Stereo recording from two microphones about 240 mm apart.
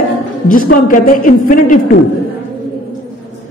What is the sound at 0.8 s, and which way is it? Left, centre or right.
Speech, left.